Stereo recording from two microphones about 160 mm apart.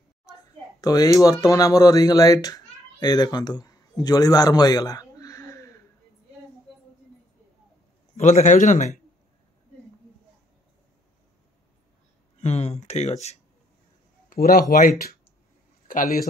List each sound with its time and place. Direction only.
0.3 s speech: 20° left (ahead or behind)
8.2 s a man's voice: 45° left (ahead or behind)
12.4 s a man's voice: 45° left (ahead or behind)
14.3 s speech: 65° left (ahead or behind)